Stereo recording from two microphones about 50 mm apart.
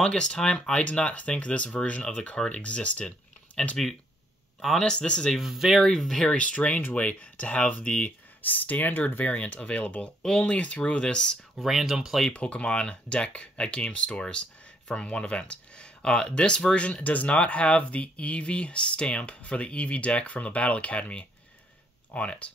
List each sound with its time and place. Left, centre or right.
0.0 s speech: centre
3.6 s speech: centre
4.6 s speech: centre
4.8 s speech: left
5.4 s speech: centre
5.8 s speech: centre
6.3 s speech: left
8.4 s speech: left
10.2 s speech: centre
11.5 s speech: centre
12.3 s speech: left